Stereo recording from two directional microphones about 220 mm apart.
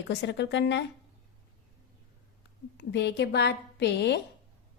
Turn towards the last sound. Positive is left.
turn(degrees=50)  # may be behind; listen again after turning